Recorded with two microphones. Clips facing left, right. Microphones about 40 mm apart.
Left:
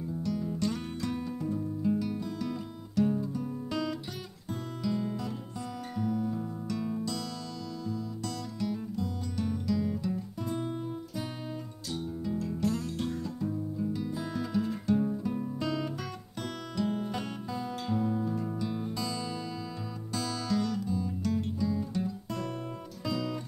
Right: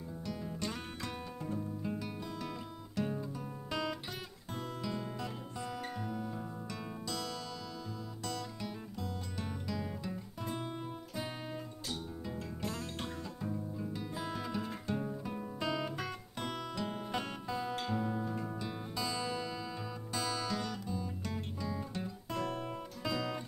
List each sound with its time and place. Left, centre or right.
0.2 s music: centre
3.0 s guitar: centre
4.8 s music: centre
12.4 s music: centre
12.9 s music: right
13.4 s guitar: centre
16.7 s music: centre